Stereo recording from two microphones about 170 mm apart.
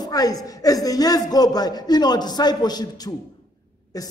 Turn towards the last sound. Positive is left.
turn(degrees=20)  # may be behind; listen again after turning